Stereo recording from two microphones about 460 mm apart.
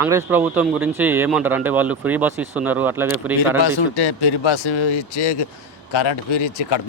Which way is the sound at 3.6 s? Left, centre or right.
Left.